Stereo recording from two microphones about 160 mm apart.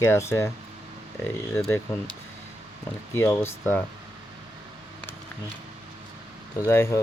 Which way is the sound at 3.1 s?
15° left (ahead or behind).